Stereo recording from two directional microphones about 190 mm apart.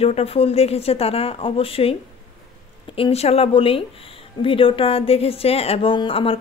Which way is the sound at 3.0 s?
35° left (ahead or behind).